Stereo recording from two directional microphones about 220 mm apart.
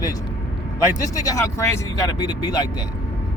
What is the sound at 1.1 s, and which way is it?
Speech, 15° left (ahead or behind).